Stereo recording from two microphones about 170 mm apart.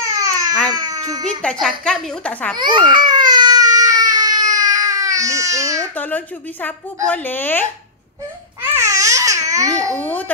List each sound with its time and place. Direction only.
0.1 s baby cry: 20° right (ahead or behind)
0.7 s a sound: 20° right (ahead or behind)
1.4 s a woman's voice: 5° left (ahead or behind)
2.5 s baby cry: 25° right (ahead or behind)
5.9 s speech: 10° left (ahead or behind)
8.7 s babbling: 20° right (ahead or behind)
9.9 s speech: 10° left (ahead or behind)